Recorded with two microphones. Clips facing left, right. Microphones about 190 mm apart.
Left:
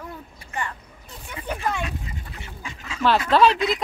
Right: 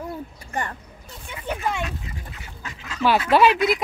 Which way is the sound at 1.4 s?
10° right (ahead or behind).